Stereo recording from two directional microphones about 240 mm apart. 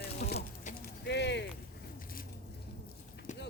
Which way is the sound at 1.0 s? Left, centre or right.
Left.